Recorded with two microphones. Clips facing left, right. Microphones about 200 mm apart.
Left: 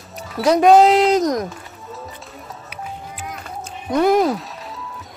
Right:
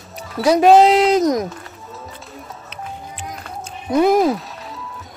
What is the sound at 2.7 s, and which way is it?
Music, 5° left (ahead or behind).